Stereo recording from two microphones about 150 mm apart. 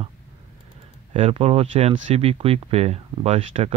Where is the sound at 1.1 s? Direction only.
40° right (ahead or behind).